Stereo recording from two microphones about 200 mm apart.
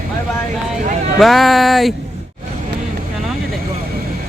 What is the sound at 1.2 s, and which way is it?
Speech, centre (ahead or behind).